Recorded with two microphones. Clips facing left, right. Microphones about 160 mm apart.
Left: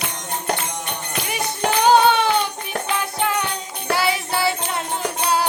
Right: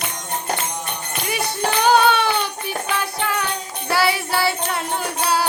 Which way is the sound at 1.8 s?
20° left (ahead or behind).